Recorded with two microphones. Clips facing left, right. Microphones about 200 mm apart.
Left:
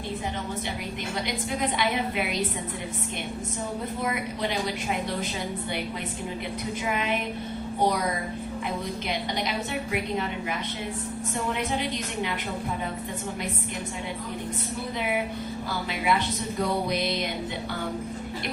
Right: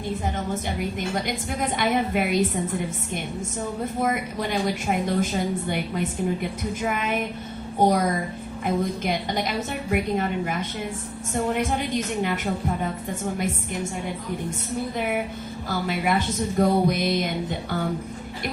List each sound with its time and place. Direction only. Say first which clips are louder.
1.6 s a woman's voice: right 4 dB; 50° right (ahead or behind)
4.0 s a woman's voice: right 4 dB; 50° right (ahead or behind)
15.9 s a woman's voice: right 2 dB; 50° right (ahead or behind)